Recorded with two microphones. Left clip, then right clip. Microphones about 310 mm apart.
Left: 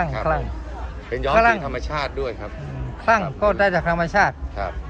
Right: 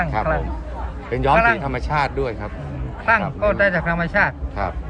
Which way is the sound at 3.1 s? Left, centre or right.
Centre.